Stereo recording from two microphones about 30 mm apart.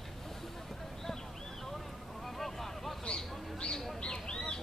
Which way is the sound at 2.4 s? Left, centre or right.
Centre.